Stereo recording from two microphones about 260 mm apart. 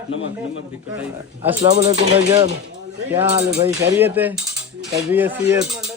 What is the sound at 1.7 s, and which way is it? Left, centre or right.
Speech, right.